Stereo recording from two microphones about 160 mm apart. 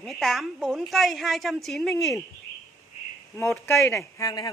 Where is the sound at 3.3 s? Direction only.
15° left (ahead or behind).